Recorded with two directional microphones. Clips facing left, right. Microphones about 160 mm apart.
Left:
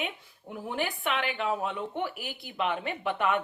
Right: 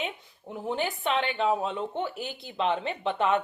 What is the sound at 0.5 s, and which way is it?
Speech, 20° right (ahead or behind).